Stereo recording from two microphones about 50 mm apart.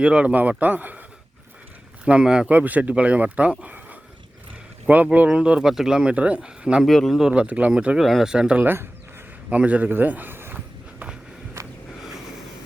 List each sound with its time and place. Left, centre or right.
0.0 s speech: right
2.0 s speech: centre
2.5 s speech: right
4.9 s speech: right
5.3 s speech: centre
6.0 s speech: right
6.8 s speech: centre
7.3 s speech: right
7.9 s speech: centre
8.3 s speech: centre
9.5 s speech: right
11.6 s walk: right
11.9 s a sound: centre